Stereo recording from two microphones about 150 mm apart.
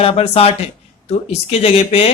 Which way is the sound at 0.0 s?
40° left (ahead or behind).